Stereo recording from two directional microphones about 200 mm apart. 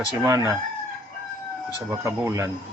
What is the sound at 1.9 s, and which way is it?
Speech, 15° right (ahead or behind).